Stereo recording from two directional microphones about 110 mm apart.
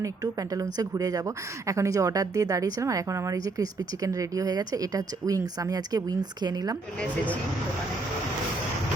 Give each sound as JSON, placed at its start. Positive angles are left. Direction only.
{"t": 0.0, "sound": "speech", "side_deg": -30}